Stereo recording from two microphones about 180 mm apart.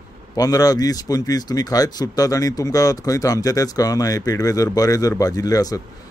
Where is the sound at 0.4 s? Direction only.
20° left (ahead or behind).